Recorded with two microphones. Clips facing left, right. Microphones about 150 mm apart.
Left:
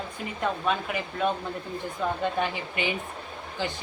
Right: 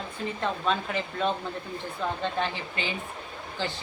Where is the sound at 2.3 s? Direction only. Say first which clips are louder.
Left 2 dB; 15° left (ahead or behind).